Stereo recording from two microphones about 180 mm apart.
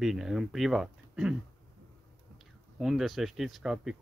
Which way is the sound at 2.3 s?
Centre (ahead or behind).